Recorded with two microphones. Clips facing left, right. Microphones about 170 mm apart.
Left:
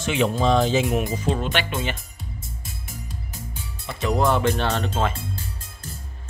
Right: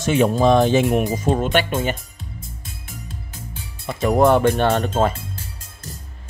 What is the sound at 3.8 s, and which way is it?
Speech, 50° right (ahead or behind).